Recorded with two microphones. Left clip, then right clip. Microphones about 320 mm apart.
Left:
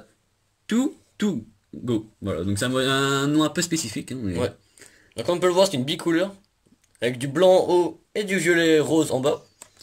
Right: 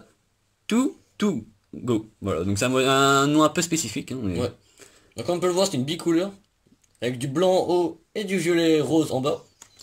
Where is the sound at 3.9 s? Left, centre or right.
Centre.